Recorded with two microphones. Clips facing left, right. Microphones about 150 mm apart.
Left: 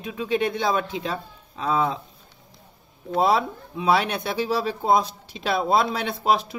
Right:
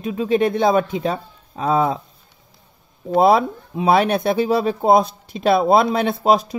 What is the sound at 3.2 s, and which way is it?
Speech, 55° right (ahead or behind).